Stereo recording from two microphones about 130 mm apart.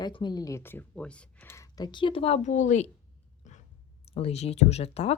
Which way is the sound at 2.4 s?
70° left (ahead or behind).